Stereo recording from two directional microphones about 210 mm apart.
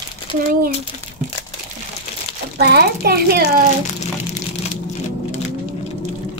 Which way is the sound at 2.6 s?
50° right (ahead or behind).